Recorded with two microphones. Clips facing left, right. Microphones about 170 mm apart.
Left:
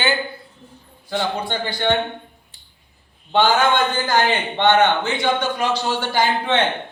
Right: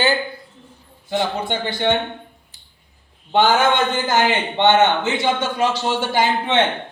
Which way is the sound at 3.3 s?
20° right (ahead or behind).